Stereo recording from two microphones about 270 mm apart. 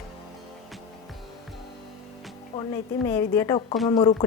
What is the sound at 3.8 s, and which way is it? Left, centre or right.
Speech, centre.